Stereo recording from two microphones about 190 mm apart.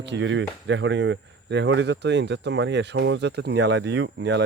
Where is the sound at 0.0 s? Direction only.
70° right (ahead or behind).